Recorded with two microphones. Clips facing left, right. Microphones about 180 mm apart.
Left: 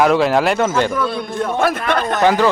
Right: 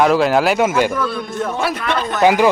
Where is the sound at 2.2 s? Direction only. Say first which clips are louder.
Right 2 dB; 10° right (ahead or behind).